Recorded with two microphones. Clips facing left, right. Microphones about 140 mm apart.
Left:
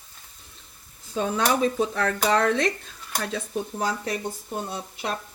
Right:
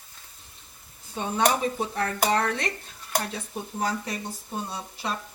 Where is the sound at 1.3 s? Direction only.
90° left.